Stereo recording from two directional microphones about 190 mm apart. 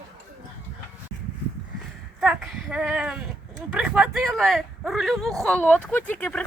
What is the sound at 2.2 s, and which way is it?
Speech, 5° right (ahead or behind).